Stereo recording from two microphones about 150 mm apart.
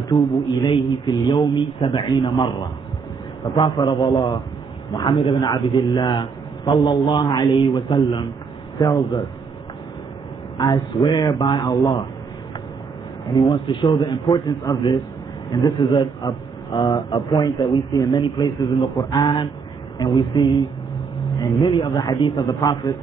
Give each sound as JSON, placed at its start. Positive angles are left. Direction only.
{"t": 0.1, "sound": "a man's voice", "side_deg": 25}
{"t": 10.6, "sound": "a man's voice", "side_deg": 25}
{"t": 13.3, "sound": "a man's voice", "side_deg": 30}